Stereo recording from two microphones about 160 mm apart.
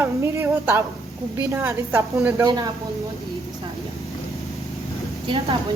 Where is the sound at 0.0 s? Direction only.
15° right (ahead or behind).